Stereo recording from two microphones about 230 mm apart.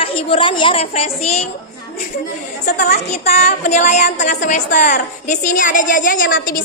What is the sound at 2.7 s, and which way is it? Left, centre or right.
A child's voice, left.